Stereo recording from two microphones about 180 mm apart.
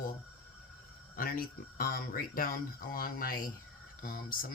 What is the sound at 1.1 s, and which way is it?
Speech, 55° left (ahead or behind).